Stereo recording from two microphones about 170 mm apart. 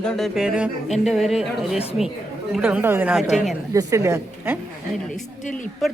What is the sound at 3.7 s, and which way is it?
Speech, 20° right (ahead or behind).